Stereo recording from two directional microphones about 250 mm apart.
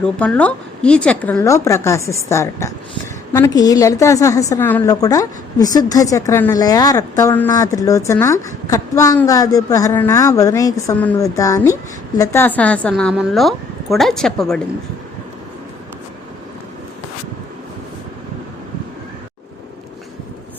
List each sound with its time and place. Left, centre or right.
0.0 s a woman's voice: centre